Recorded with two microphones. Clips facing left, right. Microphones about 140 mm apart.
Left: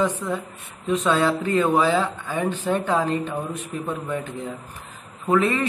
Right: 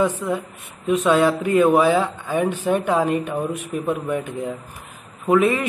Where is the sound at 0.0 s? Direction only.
15° right (ahead or behind).